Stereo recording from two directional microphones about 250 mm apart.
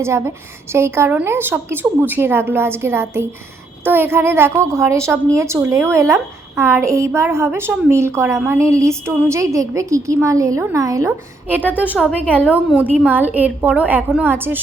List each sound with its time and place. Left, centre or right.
0.0 s a woman's voice: centre